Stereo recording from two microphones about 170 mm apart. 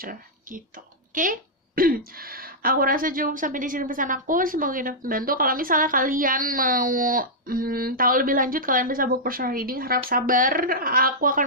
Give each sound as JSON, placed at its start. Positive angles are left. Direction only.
{"t": 0.0, "sound": "speech", "side_deg": -55}